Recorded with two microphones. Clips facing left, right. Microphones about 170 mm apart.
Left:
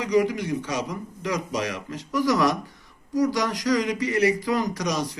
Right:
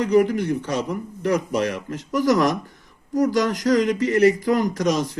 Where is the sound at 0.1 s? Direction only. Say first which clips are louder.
Right 2 dB; 55° right (ahead or behind).